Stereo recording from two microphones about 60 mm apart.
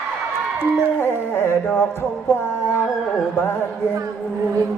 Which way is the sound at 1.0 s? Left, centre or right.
Left.